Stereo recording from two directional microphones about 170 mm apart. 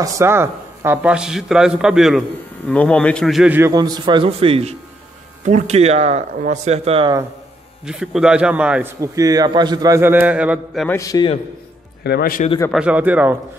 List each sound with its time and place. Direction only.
0.0 s speech: 15° right (ahead or behind)
3.7 s speech: 25° right (ahead or behind)
7.8 s speech: 5° right (ahead or behind)
9.0 s a man's voice: 20° right (ahead or behind); by 10.9 s 5° right (ahead or behind)
10.9 s a man's voice: 20° left (ahead or behind)
12.0 s speech: 65° left (ahead or behind)
12.7 s a man's voice: 10° right (ahead or behind)